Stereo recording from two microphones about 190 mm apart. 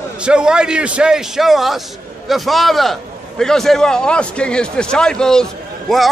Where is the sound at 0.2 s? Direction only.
5° right (ahead or behind).